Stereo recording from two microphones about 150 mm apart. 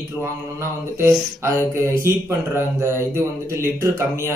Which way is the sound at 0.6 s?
20° right (ahead or behind).